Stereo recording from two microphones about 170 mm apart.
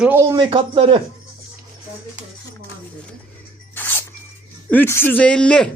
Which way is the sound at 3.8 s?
10° left (ahead or behind).